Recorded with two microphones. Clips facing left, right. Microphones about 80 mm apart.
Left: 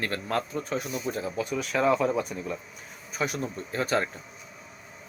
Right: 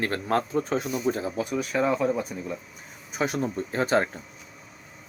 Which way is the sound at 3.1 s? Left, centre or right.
Right.